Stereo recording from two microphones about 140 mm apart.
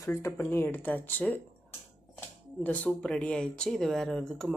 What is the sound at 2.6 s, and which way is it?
Speech, 10° left (ahead or behind).